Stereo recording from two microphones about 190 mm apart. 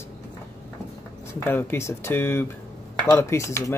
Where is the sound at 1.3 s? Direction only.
10° left (ahead or behind).